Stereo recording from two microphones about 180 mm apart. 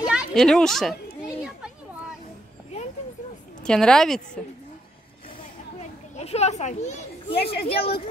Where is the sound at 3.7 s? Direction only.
5° left (ahead or behind).